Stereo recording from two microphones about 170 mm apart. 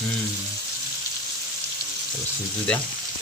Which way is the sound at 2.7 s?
5° left (ahead or behind).